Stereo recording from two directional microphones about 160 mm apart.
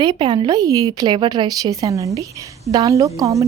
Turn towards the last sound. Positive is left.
turn(degrees=-20)  # may be behind; listen again after turning